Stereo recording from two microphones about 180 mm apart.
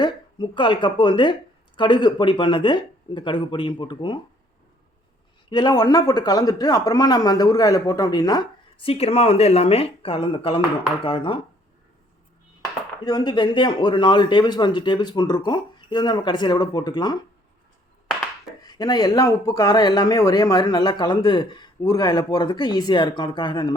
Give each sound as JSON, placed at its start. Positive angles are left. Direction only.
{"t": 0.0, "sound": "speech", "side_deg": 25}
{"t": 5.5, "sound": "speech", "side_deg": 25}
{"t": 8.9, "sound": "speech", "side_deg": 35}
{"t": 13.1, "sound": "speech", "side_deg": 25}
{"t": 18.6, "sound": "speech", "side_deg": 25}